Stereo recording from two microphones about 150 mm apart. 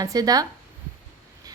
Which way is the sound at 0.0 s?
25° right (ahead or behind).